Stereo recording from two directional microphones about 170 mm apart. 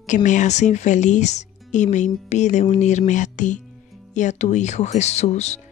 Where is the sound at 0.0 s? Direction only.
45° left (ahead or behind).